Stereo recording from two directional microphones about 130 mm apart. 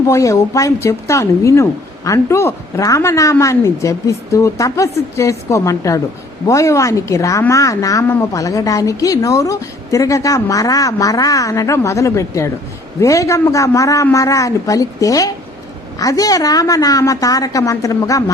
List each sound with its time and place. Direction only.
0.1 s a woman's voice: 25° left (ahead or behind)